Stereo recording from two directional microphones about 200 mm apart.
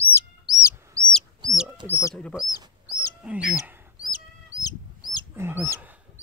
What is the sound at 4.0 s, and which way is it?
Chicken, 20° left (ahead or behind).